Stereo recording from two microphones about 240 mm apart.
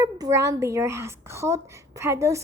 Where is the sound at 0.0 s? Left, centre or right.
Centre.